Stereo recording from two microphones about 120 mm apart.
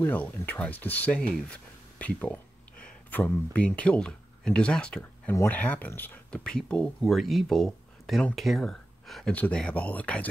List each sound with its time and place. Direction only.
0.0 s speech: 15° left (ahead or behind)
5.3 s speech: 25° left (ahead or behind)